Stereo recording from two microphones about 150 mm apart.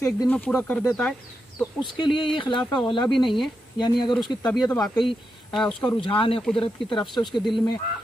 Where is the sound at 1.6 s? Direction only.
30° left (ahead or behind).